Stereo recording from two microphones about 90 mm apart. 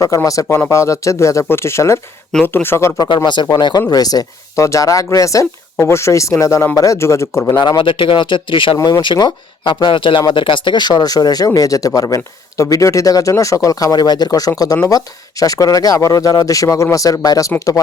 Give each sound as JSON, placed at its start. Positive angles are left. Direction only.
{"t": 0.1, "sound": "speech", "side_deg": 40}
{"t": 3.5, "sound": "speech", "side_deg": 50}
{"t": 7.8, "sound": "speech", "side_deg": 70}